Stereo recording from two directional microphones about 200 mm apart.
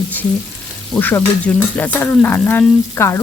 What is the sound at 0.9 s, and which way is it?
Stir, 10° left (ahead or behind).